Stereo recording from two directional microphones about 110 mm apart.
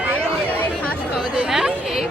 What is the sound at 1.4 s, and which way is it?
Chatter, 5° right (ahead or behind).